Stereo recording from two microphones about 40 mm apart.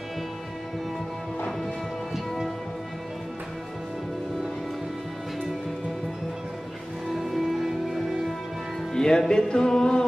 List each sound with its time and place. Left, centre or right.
7.2 s music: centre
8.9 s music: centre